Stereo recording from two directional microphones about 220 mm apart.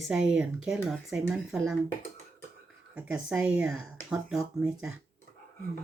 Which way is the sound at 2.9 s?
5° right (ahead or behind).